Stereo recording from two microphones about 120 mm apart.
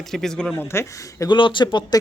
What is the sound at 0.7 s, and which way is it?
Speech, 20° left (ahead or behind).